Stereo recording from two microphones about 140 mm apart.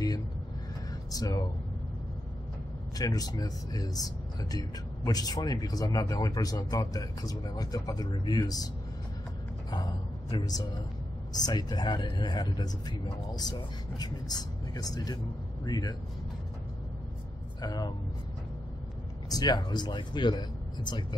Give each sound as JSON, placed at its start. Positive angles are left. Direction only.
{"t": 1.1, "sound": "speech", "side_deg": 25}
{"t": 3.0, "sound": "speech", "side_deg": 25}
{"t": 9.7, "sound": "speech", "side_deg": 30}
{"t": 17.6, "sound": "speech", "side_deg": 30}
{"t": 19.2, "sound": "speech", "side_deg": 30}